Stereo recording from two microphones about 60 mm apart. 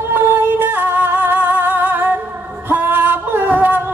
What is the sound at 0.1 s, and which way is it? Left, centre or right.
Music, right.